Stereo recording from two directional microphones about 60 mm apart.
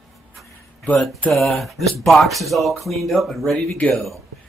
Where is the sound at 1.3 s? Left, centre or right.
Centre.